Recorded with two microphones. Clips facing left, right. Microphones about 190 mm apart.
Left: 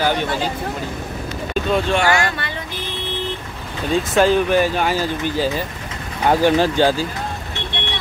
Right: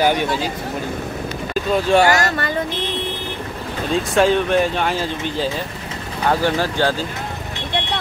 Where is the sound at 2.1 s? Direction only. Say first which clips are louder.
Right 2 dB; 40° right (ahead or behind).